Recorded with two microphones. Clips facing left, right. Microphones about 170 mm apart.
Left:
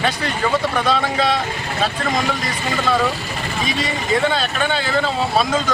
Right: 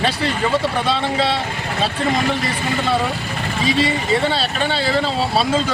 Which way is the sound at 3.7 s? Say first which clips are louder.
Right 4 dB; 30° right (ahead or behind).